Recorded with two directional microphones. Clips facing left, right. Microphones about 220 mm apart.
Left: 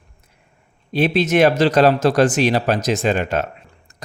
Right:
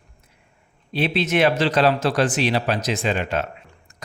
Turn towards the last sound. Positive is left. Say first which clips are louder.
# left 4 dB
turn(degrees=45)  # may be behind; listen again after turning